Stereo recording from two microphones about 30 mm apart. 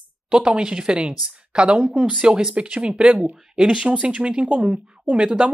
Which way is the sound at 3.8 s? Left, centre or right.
Right.